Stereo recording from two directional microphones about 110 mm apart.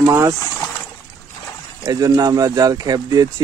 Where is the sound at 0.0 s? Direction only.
30° right (ahead or behind).